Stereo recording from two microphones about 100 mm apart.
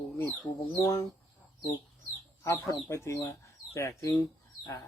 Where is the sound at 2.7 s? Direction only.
30° left (ahead or behind).